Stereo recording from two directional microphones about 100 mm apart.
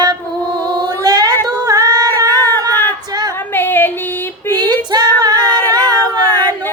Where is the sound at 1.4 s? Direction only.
40° right (ahead or behind).